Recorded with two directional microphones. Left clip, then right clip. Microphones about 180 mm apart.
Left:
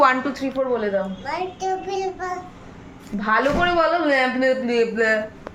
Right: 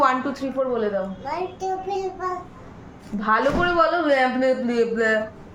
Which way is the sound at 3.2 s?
20° left (ahead or behind).